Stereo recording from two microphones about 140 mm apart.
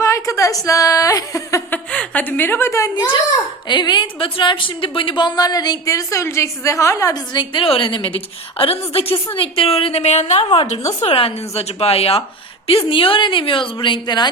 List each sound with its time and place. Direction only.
0.0 s a woman's voice: 20° left (ahead or behind)
1.9 s a woman's voice: 10° left (ahead or behind)
2.9 s a woman's voice: 35° left (ahead or behind)